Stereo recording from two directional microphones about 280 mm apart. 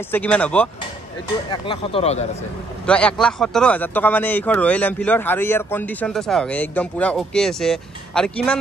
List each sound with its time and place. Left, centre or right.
0.1 s speech: centre
1.5 s speech: centre
2.9 s speech: centre